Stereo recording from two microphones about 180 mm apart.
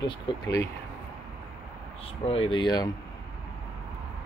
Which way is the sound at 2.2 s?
30° left (ahead or behind).